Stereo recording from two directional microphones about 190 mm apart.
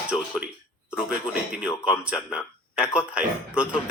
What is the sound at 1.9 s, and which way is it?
Speech, 5° right (ahead or behind).